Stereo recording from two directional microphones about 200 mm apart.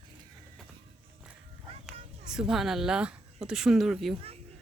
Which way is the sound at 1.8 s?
5° right (ahead or behind).